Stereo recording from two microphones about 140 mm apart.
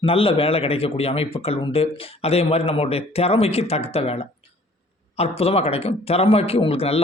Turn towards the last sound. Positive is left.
turn(degrees=45)  # may be behind; listen again after turning